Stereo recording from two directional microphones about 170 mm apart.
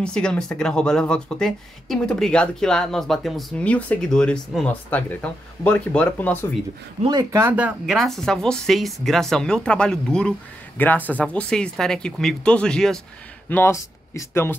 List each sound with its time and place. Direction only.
0.0 s speech: 5° left (ahead or behind)
7.1 s speech: 20° right (ahead or behind)
7.4 s speech: 10° right (ahead or behind)
7.8 s speech: centre (ahead or behind)
13.5 s speech: 15° left (ahead or behind)